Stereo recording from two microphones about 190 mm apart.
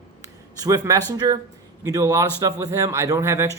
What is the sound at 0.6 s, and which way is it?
Speech, 20° right (ahead or behind).